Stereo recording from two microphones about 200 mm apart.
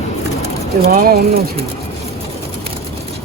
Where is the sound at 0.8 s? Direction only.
50° right (ahead or behind).